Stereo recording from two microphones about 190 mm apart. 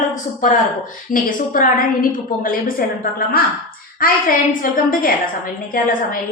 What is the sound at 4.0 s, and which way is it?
Speech, 45° left (ahead or behind).